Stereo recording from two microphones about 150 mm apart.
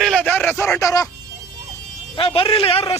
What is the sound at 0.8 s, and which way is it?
Speech, 25° left (ahead or behind).